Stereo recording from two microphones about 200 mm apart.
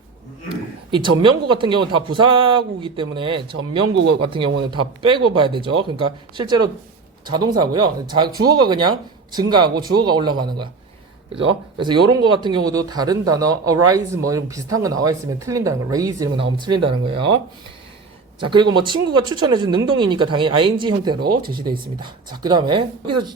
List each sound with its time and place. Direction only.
0.4 s a sound: 25° right (ahead or behind)
1.2 s speech: 25° right (ahead or behind)
11.8 s speech: 25° right (ahead or behind)
18.3 s speech: 25° right (ahead or behind)
21.2 s speech: 45° right (ahead or behind)
22.4 s speech: 20° right (ahead or behind)